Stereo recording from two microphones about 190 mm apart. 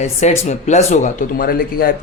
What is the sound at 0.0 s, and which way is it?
Speech, 35° left (ahead or behind).